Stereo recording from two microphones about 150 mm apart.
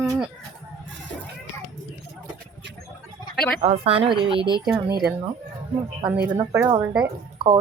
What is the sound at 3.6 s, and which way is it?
Speech, 40° right (ahead or behind).